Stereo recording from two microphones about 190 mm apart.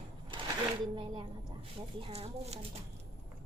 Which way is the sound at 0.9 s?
25° right (ahead or behind).